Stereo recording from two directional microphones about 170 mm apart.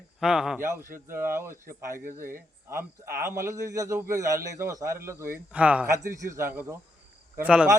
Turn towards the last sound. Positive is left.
turn(degrees=-5)  # may be behind; listen again after turning